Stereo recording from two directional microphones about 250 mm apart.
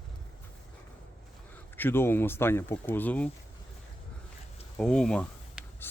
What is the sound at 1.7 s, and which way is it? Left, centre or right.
Speech, centre.